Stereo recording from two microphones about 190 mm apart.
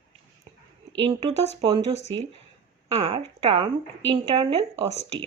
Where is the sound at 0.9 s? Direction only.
30° right (ahead or behind).